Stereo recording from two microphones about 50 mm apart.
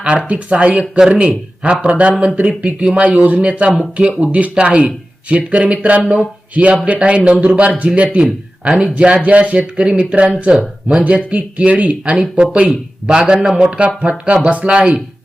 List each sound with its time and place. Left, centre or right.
0.0 s speech: right
1.9 s speech: right
4.2 s speech: right